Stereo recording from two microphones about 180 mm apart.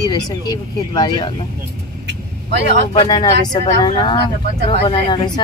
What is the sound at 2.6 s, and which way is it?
Speech, 40° left (ahead or behind).